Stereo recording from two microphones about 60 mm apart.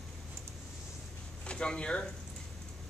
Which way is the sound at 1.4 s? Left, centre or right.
Centre.